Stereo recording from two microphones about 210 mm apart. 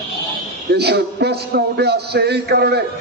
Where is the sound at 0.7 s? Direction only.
50° right (ahead or behind).